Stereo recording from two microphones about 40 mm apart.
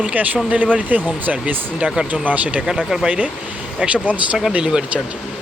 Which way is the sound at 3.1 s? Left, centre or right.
Right.